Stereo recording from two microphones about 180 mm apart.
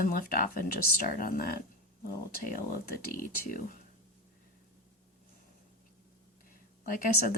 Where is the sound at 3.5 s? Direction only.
50° left (ahead or behind).